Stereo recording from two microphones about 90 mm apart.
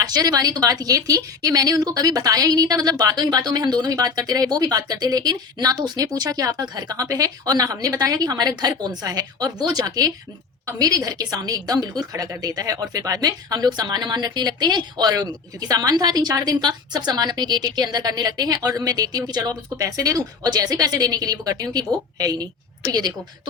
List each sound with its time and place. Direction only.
0.0 s a woman's voice: 45° right (ahead or behind)